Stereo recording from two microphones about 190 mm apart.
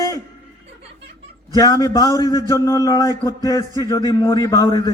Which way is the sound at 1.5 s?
20° left (ahead or behind).